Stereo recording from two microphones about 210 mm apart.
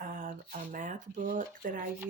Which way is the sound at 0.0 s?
40° right (ahead or behind).